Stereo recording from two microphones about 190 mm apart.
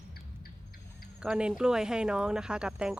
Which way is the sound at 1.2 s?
5° right (ahead or behind).